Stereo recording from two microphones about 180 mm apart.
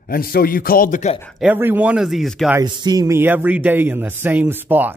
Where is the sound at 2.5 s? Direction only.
20° right (ahead or behind).